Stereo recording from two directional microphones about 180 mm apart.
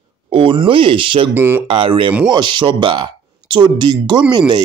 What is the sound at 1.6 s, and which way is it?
Speech, 30° right (ahead or behind).